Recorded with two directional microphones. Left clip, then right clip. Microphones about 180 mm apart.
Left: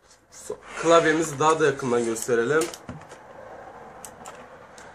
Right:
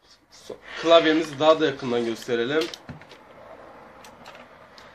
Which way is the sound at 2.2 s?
25° right (ahead or behind).